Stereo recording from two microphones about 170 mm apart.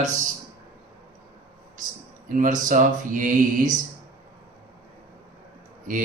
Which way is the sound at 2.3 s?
50° right (ahead or behind).